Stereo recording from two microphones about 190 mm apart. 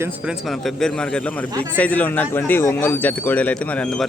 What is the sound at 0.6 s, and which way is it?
A man's voice, 5° left (ahead or behind).